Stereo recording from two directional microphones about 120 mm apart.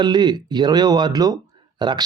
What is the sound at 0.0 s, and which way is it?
A man's voice, 35° right (ahead or behind).